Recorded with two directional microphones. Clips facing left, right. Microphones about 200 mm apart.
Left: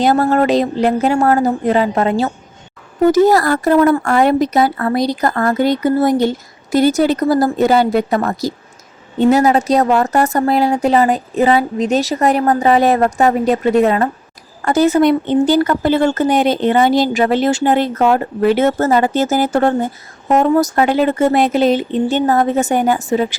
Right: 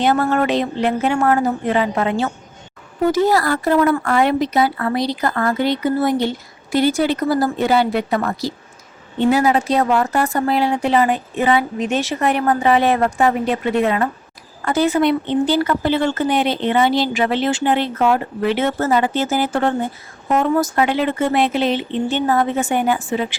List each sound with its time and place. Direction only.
0.0 s a woman's voice: 40° left (ahead or behind)